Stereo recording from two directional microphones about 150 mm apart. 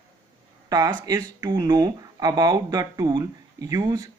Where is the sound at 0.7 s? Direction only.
25° right (ahead or behind).